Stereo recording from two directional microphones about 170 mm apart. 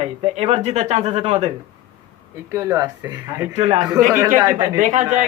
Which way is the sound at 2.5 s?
20° right (ahead or behind).